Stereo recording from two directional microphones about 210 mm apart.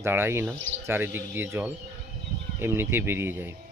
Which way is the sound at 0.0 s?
10° right (ahead or behind).